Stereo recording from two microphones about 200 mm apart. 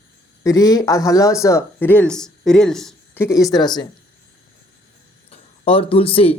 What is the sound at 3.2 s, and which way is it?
Speech, 15° left (ahead or behind).